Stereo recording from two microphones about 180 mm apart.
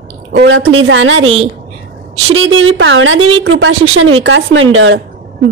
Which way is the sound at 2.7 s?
90° right.